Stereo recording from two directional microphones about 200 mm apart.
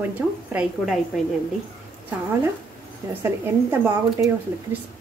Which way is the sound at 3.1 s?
10° right (ahead or behind).